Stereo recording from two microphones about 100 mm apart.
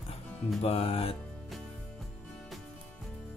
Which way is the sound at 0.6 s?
75° left (ahead or behind).